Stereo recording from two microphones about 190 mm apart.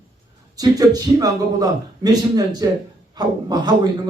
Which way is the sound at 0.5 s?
20° right (ahead or behind).